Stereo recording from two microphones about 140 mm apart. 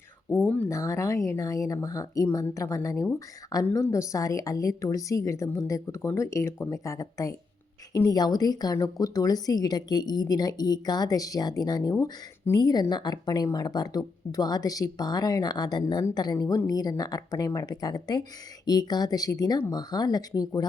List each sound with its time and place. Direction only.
0.3 s speech: 10° left (ahead or behind)
0.7 s speech: 20° left (ahead or behind)